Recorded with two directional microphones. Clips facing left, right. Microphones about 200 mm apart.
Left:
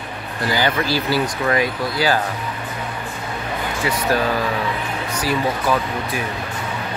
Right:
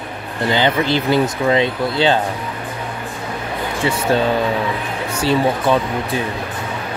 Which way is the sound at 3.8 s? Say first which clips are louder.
Right 3 dB; 25° right (ahead or behind).